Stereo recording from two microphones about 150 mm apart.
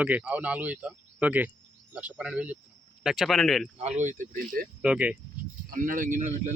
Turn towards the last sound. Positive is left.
turn(degrees=-55)  # may be behind; listen again after turning